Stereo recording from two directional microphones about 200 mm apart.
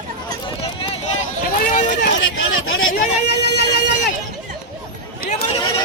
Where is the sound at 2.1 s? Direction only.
70° left (ahead or behind).